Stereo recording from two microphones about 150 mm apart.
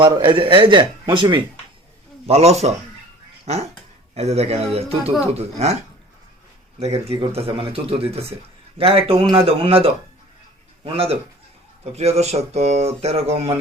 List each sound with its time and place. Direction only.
0.0 s speech: 30° right (ahead or behind)
2.2 s speech: 45° right (ahead or behind)
6.7 s speech: 45° right (ahead or behind)